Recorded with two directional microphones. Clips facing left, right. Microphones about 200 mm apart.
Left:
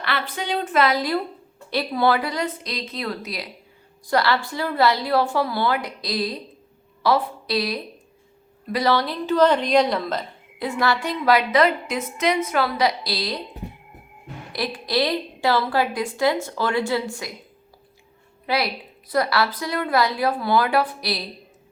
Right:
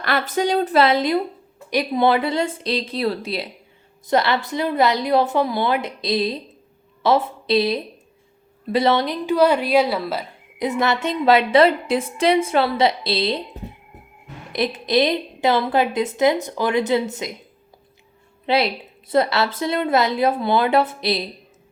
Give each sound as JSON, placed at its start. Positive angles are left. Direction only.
{"t": 0.0, "sound": "a woman's voice", "side_deg": -45}
{"t": 10.6, "sound": "a woman's voice", "side_deg": -20}
{"t": 14.5, "sound": "a woman's voice", "side_deg": -20}
{"t": 18.4, "sound": "a woman's voice", "side_deg": -25}